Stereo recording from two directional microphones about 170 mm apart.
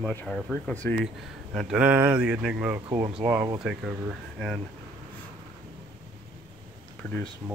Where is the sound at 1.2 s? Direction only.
Centre (ahead or behind).